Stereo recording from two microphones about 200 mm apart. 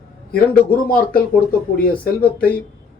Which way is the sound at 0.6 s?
45° left (ahead or behind).